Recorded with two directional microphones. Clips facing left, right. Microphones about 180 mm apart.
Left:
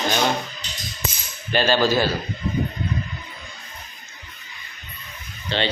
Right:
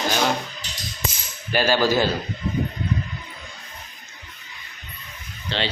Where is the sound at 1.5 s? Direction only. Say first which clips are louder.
Even; 10° right (ahead or behind).